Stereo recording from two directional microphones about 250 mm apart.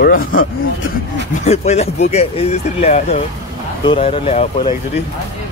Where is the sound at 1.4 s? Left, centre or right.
Left.